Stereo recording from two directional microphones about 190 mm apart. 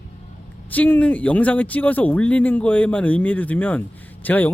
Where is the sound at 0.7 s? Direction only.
10° left (ahead or behind).